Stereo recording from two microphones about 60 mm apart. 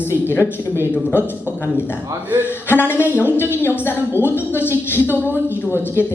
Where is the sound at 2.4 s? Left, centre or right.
Left.